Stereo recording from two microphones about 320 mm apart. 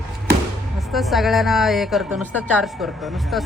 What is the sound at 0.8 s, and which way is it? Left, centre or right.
A woman's voice, centre.